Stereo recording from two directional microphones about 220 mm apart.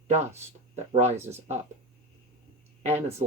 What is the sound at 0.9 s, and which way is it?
Speech, 30° right (ahead or behind).